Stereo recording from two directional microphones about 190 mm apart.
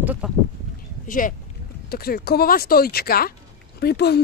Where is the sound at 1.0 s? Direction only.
45° left (ahead or behind).